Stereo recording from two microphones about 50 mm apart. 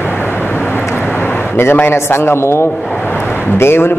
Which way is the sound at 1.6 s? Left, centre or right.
Left.